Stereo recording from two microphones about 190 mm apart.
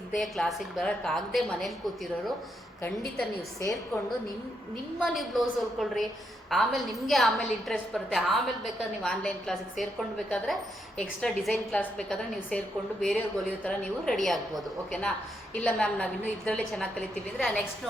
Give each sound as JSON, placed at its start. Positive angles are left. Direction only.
{"t": 0.2, "sound": "a woman's voice", "side_deg": 0}
{"t": 2.8, "sound": "a woman's voice", "side_deg": 0}
{"t": 4.9, "sound": "a woman's voice", "side_deg": 0}